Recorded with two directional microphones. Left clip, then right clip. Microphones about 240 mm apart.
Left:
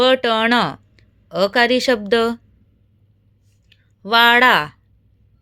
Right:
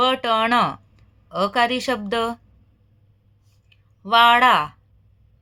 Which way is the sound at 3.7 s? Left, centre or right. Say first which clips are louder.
Left 1 dB; left.